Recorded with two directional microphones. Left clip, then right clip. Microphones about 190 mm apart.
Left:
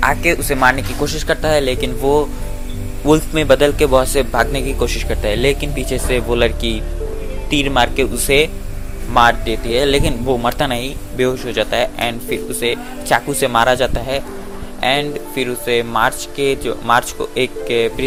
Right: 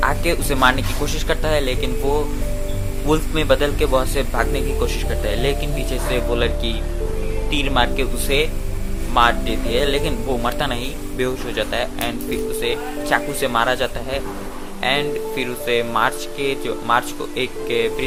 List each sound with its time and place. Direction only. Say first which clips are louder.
0.0 s a man's voice: left 5 dB; 15° left (ahead or behind)